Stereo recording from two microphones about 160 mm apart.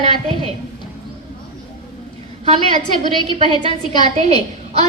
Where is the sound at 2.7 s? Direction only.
30° left (ahead or behind).